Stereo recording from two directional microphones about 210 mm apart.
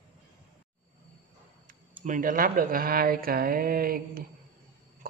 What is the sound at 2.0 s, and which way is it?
Speech, 40° right (ahead or behind).